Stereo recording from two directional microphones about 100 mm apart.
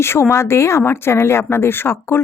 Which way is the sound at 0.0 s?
25° left (ahead or behind).